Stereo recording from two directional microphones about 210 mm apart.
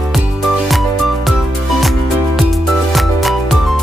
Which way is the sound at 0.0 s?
Centre (ahead or behind).